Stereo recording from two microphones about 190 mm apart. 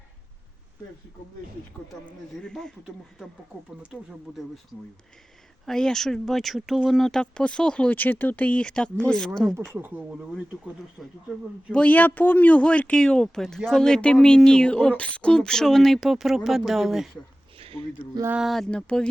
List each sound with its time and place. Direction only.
2.0 s a man's voice: 5° left (ahead or behind)
5.6 s a man's voice: centre (ahead or behind)
9.7 s a man's voice: 10° right (ahead or behind)
17.6 s a sound: 30° right (ahead or behind)
18.1 s a man's voice: 10° right (ahead or behind); by 19.0 s 5° left (ahead or behind)